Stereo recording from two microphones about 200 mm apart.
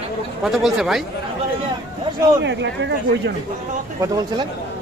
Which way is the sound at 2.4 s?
60° right (ahead or behind).